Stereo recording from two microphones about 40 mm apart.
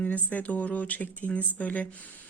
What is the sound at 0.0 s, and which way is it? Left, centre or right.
Speech, left.